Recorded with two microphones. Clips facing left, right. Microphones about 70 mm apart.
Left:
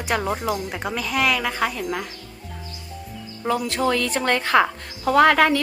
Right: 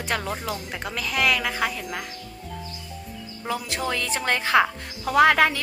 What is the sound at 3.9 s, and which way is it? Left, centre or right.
A woman's voice, centre.